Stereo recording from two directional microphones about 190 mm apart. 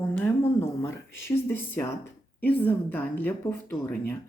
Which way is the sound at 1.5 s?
10° left (ahead or behind).